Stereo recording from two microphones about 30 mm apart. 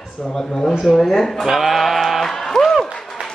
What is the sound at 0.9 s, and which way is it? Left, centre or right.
Speech, centre.